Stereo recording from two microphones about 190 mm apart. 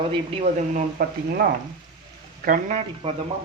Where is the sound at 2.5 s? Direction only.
35° right (ahead or behind).